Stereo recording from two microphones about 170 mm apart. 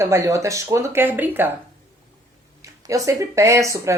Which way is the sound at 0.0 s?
15° right (ahead or behind).